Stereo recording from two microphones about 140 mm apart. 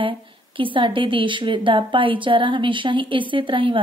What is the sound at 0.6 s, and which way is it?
Speech, 35° right (ahead or behind).